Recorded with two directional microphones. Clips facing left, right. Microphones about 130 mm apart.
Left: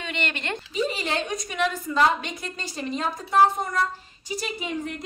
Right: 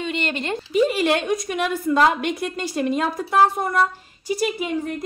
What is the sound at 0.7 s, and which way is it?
A woman's voice, 60° right (ahead or behind).